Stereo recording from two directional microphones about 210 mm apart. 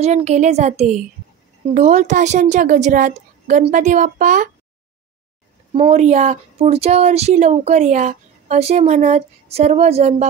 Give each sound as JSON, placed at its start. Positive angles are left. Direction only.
{"t": 0.0, "sound": "speech", "side_deg": -30}
{"t": 5.7, "sound": "speech", "side_deg": -30}